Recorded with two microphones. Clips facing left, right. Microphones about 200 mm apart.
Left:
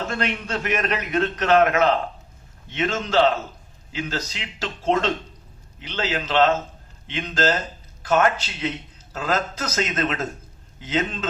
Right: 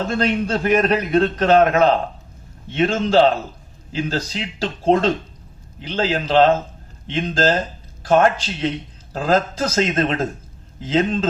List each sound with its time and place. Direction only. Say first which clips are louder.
0.0 s a man's voice: right 7 dB; 35° right (ahead or behind)